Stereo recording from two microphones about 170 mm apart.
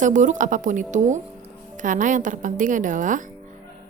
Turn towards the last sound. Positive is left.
turn(degrees=-50)  # may be behind; listen again after turning